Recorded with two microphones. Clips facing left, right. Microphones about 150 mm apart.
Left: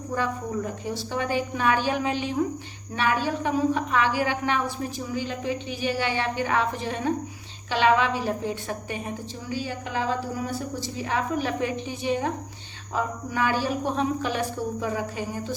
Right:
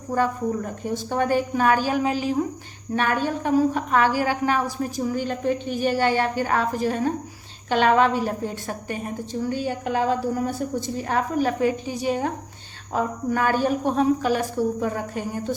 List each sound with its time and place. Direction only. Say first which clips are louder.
0.9 s a woman's voice: right 8 dB; 50° right (ahead or behind)
2.9 s a woman's voice: right 2 dB; 50° right (ahead or behind)